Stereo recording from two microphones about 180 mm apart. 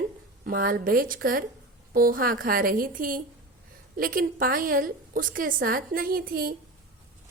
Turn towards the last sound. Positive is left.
turn(degrees=-55)  # may be behind; listen again after turning